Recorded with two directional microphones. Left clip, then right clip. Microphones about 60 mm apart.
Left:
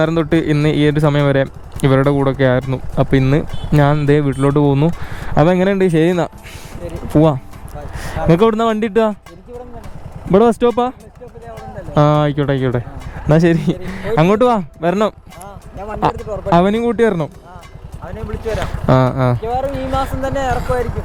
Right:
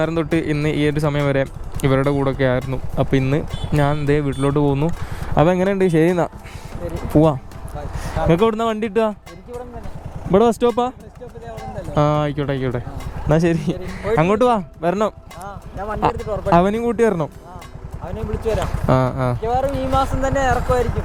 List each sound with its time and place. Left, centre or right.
0.0 s speech: left
7.9 s a sound: left
8.3 s speech: left
10.3 s speech: left
11.9 s speech: left
16.1 s speech: right
16.5 s speech: left
18.1 s speech: right
18.5 s speech: left
20.2 s speech: centre
20.7 s speech: right